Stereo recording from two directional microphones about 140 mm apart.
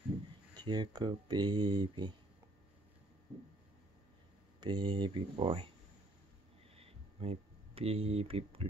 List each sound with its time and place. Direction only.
0.7 s speech: 30° right (ahead or behind)
4.6 s speech: 30° right (ahead or behind)
6.8 s a sound: 45° right (ahead or behind)